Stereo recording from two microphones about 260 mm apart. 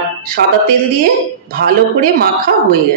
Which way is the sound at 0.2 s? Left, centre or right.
Right.